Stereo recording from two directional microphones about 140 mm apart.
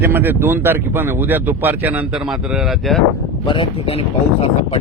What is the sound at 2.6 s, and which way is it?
Speech, centre (ahead or behind).